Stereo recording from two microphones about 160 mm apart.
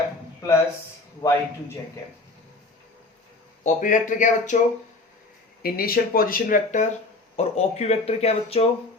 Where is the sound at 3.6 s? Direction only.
55° left (ahead or behind).